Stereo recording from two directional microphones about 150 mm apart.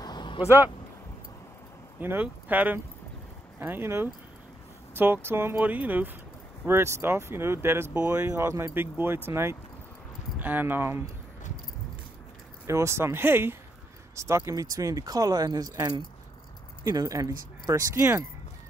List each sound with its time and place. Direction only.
0.0 s a sound: 30° left (ahead or behind)
2.0 s speech: 10° right (ahead or behind)
12.6 s speech: 20° right (ahead or behind)